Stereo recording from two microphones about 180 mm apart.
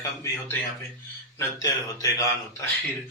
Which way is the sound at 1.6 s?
20° left (ahead or behind).